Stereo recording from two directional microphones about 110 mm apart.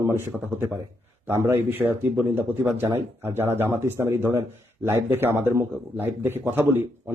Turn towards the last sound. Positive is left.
turn(degrees=-20)  # may be behind; listen again after turning